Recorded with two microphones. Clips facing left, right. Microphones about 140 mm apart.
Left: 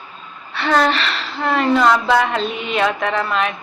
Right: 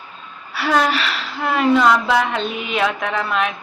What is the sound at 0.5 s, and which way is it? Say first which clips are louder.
A woman's voice: left 1 dB; 5° right (ahead or behind).